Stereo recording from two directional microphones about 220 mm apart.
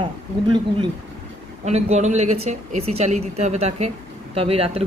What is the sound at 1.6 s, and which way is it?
Speech, 30° right (ahead or behind).